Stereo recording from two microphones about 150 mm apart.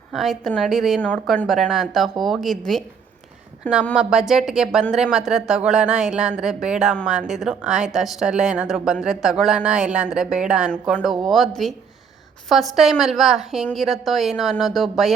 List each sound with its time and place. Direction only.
0.1 s speech: centre (ahead or behind)
1.0 s speech: 10° left (ahead or behind)
3.9 s speech: 5° right (ahead or behind)